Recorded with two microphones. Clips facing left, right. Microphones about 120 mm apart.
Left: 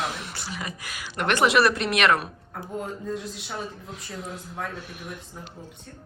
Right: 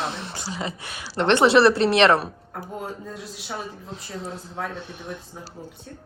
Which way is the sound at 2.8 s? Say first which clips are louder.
Left 5 dB; centre (ahead or behind).